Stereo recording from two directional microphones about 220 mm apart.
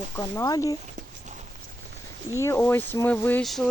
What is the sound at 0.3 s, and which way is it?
Speech, 15° left (ahead or behind).